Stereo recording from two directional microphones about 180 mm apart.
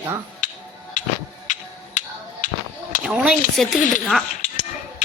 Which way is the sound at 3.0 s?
5° right (ahead or behind).